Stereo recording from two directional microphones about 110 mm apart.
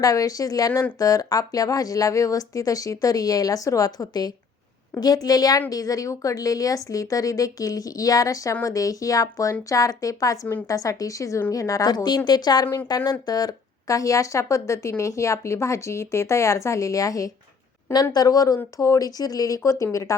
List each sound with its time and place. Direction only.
0.0 s a woman's voice: 30° left (ahead or behind)
0.7 s speech: 20° left (ahead or behind)
0.9 s a woman's voice: 30° left (ahead or behind)